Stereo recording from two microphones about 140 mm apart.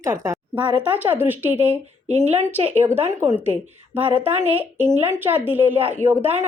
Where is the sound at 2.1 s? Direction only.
50° right (ahead or behind).